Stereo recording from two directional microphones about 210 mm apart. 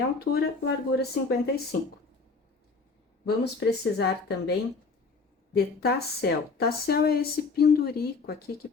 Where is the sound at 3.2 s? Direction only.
55° left (ahead or behind).